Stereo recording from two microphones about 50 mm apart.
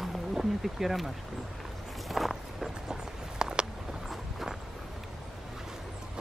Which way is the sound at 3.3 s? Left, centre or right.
Centre.